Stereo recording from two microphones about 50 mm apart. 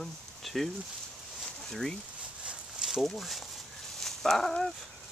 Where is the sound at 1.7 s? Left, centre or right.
Centre.